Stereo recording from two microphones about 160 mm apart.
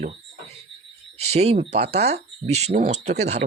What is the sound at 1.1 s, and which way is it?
Speech, 45° right (ahead or behind).